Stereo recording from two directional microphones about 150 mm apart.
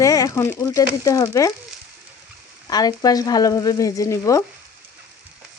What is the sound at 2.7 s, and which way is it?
Speech, 25° left (ahead or behind).